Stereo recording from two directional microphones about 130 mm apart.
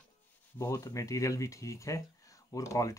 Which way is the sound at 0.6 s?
25° left (ahead or behind).